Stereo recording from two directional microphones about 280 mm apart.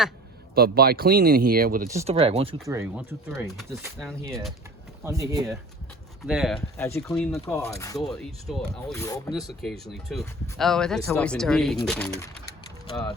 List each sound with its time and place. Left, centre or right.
0.5 s speech: right
2.6 s speech: centre
6.2 s speech: centre
8.0 s speech: centre
8.9 s speech: centre
9.3 s speech: centre